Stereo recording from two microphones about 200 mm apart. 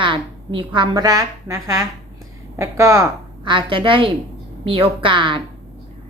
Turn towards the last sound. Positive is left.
turn(degrees=-25)  # may be behind; listen again after turning